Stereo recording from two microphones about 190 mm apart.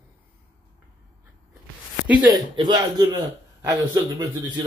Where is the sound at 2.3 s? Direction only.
25° right (ahead or behind).